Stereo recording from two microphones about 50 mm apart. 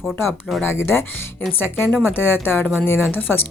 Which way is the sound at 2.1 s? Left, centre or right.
Left.